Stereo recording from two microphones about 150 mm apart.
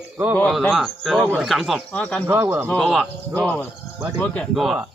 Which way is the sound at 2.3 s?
15° right (ahead or behind).